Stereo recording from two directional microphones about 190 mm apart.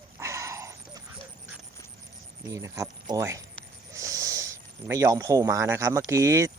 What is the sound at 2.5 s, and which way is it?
Speech, 15° right (ahead or behind).